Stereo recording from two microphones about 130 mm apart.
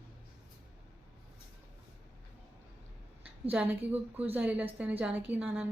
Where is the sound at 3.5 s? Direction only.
15° right (ahead or behind).